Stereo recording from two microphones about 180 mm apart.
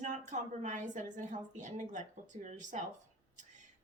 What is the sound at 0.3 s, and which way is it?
A woman's voice, 45° right (ahead or behind).